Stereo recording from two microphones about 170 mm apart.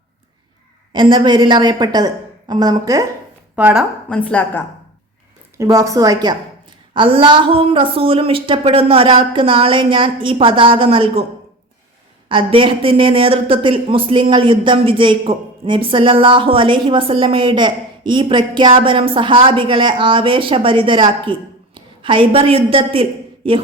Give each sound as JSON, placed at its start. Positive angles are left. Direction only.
{"t": 0.9, "sound": "a woman's voice", "side_deg": -25}
{"t": 3.5, "sound": "speech", "side_deg": -10}
{"t": 4.1, "sound": "a woman's voice", "side_deg": 10}
{"t": 5.5, "sound": "a woman's voice", "side_deg": -20}
{"t": 12.3, "sound": "a woman's voice", "side_deg": -30}